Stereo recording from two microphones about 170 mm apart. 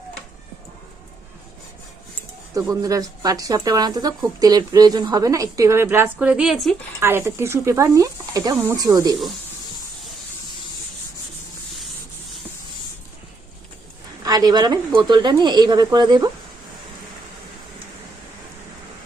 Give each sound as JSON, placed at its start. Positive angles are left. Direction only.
{"t": 2.6, "sound": "speech", "side_deg": -20}
{"t": 7.0, "sound": "speech", "side_deg": -15}
{"t": 14.3, "sound": "speech", "side_deg": -20}